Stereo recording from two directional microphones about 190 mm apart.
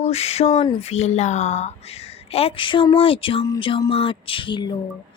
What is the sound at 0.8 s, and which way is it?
A woman's voice, 35° left (ahead or behind).